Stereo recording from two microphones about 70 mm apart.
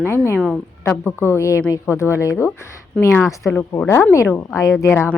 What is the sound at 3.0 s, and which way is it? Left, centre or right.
Speech, left.